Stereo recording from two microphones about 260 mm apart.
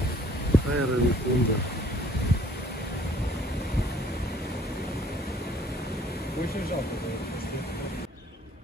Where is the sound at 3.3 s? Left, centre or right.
Left.